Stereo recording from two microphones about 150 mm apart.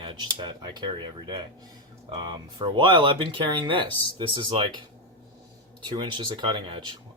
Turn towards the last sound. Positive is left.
turn(degrees=-30)  # may be behind; listen again after turning